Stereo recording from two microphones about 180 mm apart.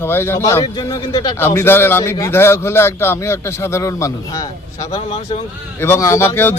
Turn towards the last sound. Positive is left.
turn(degrees=10)  # may be behind; listen again after turning